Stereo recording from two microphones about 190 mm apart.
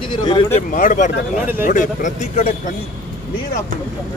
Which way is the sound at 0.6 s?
45° left (ahead or behind).